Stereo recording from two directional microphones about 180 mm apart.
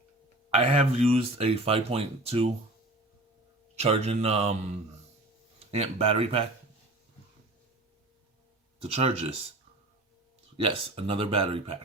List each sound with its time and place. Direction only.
0.6 s speech: 35° right (ahead or behind)
3.8 s speech: 35° right (ahead or behind)
8.8 s speech: 30° right (ahead or behind)
10.6 s speech: 30° right (ahead or behind)